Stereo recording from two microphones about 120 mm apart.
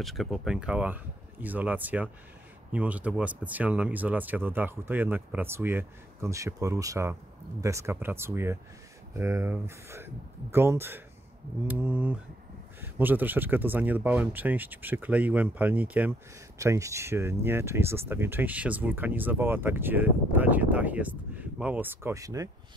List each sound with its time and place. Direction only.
0.0 s speech: centre (ahead or behind)
16.5 s speech: 25° right (ahead or behind)